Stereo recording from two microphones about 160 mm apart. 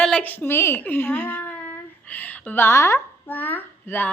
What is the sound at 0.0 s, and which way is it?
A woman's voice, 5° left (ahead or behind).